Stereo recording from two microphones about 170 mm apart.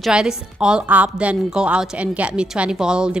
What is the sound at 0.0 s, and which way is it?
A woman's voice, 5° right (ahead or behind).